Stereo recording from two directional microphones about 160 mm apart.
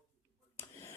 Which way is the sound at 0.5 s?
15° left (ahead or behind).